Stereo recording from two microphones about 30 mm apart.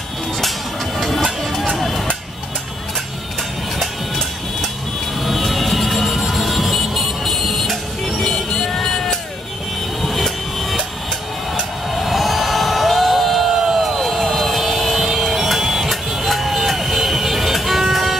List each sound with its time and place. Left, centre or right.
0.9 s music: centre
1.8 s a sound: centre
3.8 s music: centre
5.2 s vehicle: centre
8.3 s music: centre
10.0 s vehicle: centre
11.9 s a sound: centre
13.7 s vehicle: centre
15.1 s music: centre